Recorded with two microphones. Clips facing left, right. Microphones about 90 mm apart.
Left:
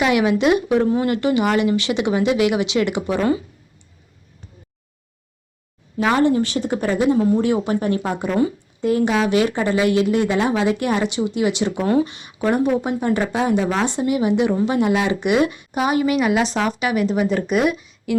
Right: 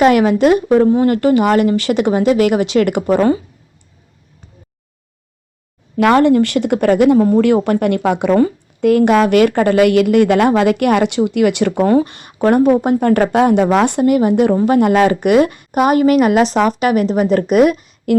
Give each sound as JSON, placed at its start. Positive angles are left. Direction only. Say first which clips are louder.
{"t": 0.0, "sound": "speech", "louder": "right 6 dB", "side_deg": -45}
{"t": 6.0, "sound": "speech", "louder": "right 6 dB", "side_deg": -65}
{"t": 8.4, "sound": "a woman's voice", "louder": "right 6 dB", "side_deg": -60}